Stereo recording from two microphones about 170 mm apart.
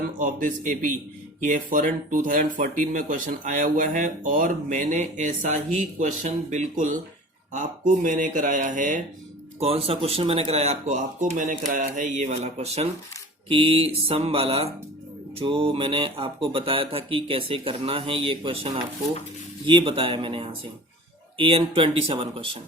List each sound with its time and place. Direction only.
0.2 s speech: 50° right (ahead or behind)
9.6 s speech: 35° right (ahead or behind)